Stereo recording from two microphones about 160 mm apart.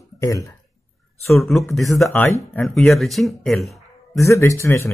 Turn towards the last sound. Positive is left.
turn(degrees=20)  # may be behind; listen again after turning